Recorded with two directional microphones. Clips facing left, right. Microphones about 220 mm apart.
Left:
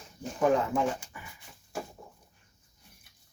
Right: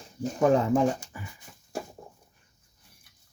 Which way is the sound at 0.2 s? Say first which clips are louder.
Right 3 dB; 40° right (ahead or behind).